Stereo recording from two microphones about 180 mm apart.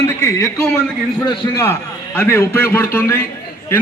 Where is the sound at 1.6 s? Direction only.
15° left (ahead or behind).